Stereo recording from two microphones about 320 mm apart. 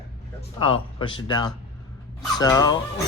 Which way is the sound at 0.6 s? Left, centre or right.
Centre.